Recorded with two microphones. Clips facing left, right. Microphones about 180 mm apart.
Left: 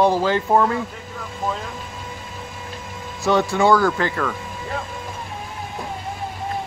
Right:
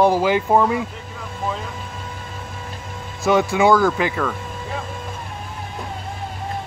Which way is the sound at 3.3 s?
10° right (ahead or behind).